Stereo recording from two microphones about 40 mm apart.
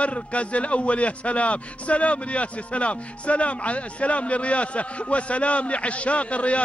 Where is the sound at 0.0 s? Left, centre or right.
Left.